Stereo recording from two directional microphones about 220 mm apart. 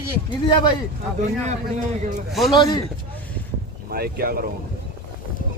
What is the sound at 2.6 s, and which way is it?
Speech, 20° left (ahead or behind).